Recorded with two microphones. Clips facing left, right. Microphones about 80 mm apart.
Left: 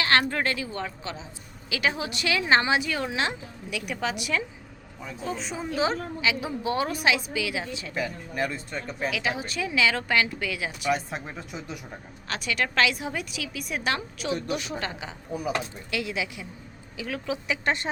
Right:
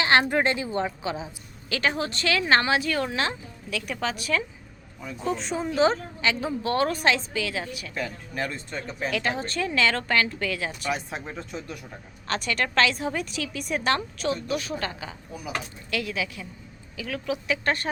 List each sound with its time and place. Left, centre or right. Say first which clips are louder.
0.0 s a woman's voice: right 3 dB; right
1.7 s speech: right 1 dB; centre
5.2 s speech: right 4 dB; centre; by 7.9 s left
7.9 s speech: left 2 dB; centre
10.9 s a woman's voice: left 2 dB; centre
14.4 s a woman's voice: right 1 dB; left